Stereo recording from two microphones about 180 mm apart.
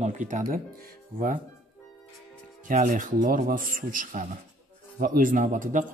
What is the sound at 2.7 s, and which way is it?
Speech, 50° right (ahead or behind).